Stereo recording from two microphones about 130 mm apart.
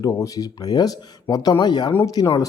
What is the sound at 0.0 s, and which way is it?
Speech, 25° left (ahead or behind).